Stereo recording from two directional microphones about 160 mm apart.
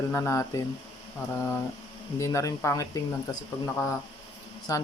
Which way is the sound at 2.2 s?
20° left (ahead or behind).